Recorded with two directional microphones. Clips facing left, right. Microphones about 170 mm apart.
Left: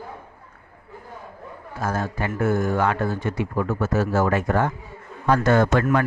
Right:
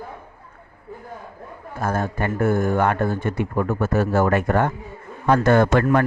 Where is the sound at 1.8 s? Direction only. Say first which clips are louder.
Right 2 dB; 55° right (ahead or behind).